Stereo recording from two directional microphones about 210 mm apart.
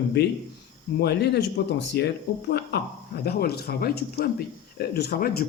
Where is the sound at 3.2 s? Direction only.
50° left (ahead or behind).